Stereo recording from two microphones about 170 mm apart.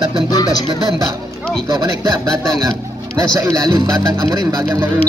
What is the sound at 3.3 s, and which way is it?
Speech, 20° right (ahead or behind).